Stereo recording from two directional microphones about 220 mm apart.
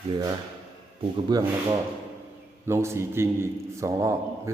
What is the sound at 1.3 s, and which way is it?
Speech, 20° right (ahead or behind).